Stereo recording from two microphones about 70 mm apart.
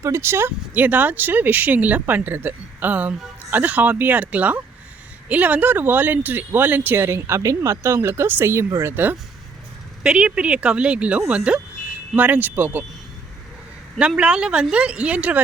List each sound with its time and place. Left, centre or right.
0.0 s speech: right
0.7 s speech: right
10.0 s speech: centre
14.2 s speech: centre